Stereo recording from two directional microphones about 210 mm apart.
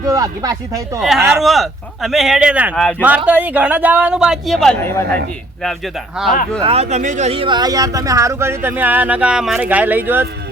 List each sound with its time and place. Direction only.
0.0 s speech: 15° right (ahead or behind)
0.9 s speech: centre (ahead or behind)
6.2 s speech: centre (ahead or behind)
6.6 s speech: 30° right (ahead or behind); by 10.2 s 10° right (ahead or behind)